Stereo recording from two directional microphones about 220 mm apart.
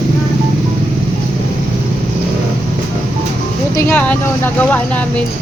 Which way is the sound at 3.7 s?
5° left (ahead or behind).